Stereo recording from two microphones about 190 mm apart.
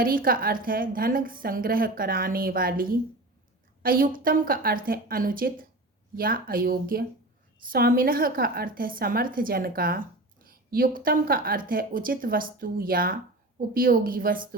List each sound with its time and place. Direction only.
0.0 s a woman's voice: 50° right (ahead or behind)
3.8 s a woman's voice: 50° right (ahead or behind)